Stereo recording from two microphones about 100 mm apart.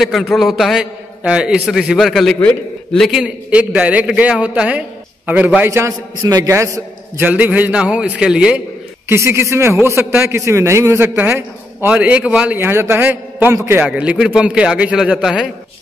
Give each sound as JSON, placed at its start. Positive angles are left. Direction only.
{"t": 0.0, "sound": "a man's voice", "side_deg": 0}
{"t": 3.1, "sound": "a man's voice", "side_deg": -10}
{"t": 5.7, "sound": "a man's voice", "side_deg": -30}
{"t": 7.2, "sound": "a man's voice", "side_deg": -15}
{"t": 9.1, "sound": "a man's voice", "side_deg": -30}
{"t": 12.5, "sound": "a man's voice", "side_deg": -25}